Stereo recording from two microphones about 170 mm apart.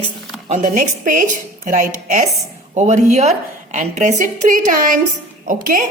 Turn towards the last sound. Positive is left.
turn(degrees=-50)  # may be behind; listen again after turning